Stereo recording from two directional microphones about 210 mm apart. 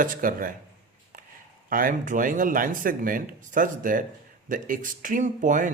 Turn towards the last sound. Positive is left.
turn(degrees=-35)  # may be behind; listen again after turning